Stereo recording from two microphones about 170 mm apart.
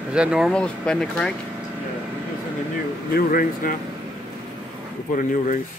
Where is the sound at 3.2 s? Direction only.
60° left (ahead or behind).